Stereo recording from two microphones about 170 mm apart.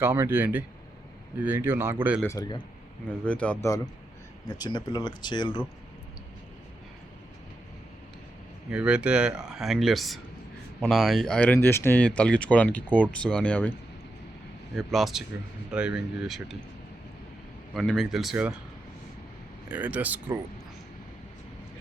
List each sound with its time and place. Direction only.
0.0 s speech: 15° right (ahead or behind)
2.2 s speech: 20° left (ahead or behind)
3.2 s speech: 5° left (ahead or behind)
4.4 s speech: 25° left (ahead or behind)
8.7 s speech: 5° right (ahead or behind)
14.8 s speech: centre (ahead or behind)
17.7 s speech: centre (ahead or behind)
19.6 s speech: 10° right (ahead or behind)